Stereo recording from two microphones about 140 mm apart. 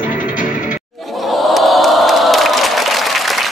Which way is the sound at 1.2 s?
Centre (ahead or behind).